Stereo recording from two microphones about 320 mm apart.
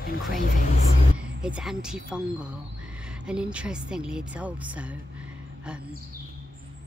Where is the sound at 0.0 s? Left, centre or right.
Left.